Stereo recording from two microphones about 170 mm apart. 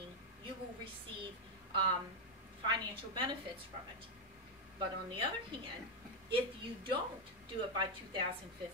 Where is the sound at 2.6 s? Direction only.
25° right (ahead or behind).